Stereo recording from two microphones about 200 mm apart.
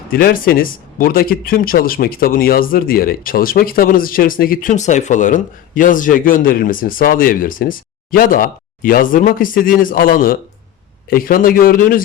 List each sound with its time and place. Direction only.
0.1 s speech: 45° left (ahead or behind)